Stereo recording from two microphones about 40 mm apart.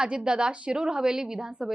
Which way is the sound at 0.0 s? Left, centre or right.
Right.